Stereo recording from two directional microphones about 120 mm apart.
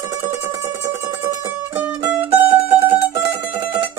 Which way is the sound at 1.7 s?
15° right (ahead or behind).